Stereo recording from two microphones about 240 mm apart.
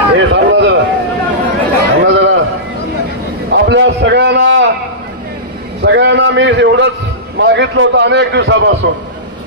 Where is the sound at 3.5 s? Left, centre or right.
Right.